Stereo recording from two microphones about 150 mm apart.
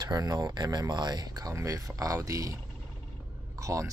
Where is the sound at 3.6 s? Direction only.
20° right (ahead or behind).